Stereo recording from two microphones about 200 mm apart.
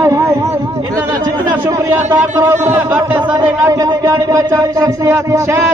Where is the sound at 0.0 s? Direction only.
15° right (ahead or behind).